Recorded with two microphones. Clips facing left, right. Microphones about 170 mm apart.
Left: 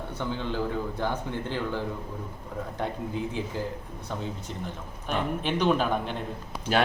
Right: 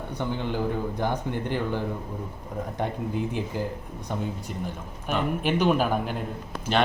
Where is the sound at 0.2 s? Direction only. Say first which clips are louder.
Right 2 dB; 15° right (ahead or behind).